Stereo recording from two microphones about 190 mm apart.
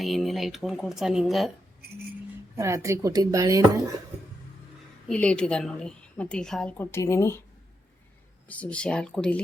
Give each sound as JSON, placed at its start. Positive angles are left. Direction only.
{"t": 0.0, "sound": "a woman's voice", "side_deg": 0}
{"t": 2.6, "sound": "speech", "side_deg": -15}
{"t": 5.0, "sound": "a woman's voice", "side_deg": 5}
{"t": 8.4, "sound": "a woman's voice", "side_deg": 10}